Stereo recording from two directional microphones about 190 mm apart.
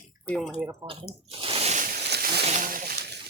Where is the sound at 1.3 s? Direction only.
30° right (ahead or behind); by 2.5 s 55° right (ahead or behind).